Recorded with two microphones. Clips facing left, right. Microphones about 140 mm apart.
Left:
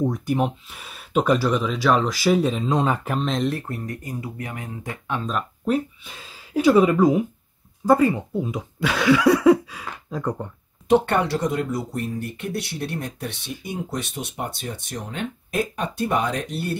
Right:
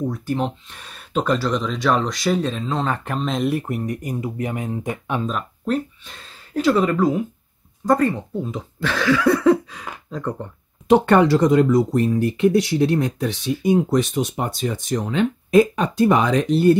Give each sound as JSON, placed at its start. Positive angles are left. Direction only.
{"t": 0.1, "sound": "speech", "side_deg": 10}
{"t": 3.2, "sound": "speech", "side_deg": 0}
{"t": 3.5, "sound": "speech", "side_deg": -15}
{"t": 5.7, "sound": "speech", "side_deg": 5}
{"t": 11.1, "sound": "speech", "side_deg": -90}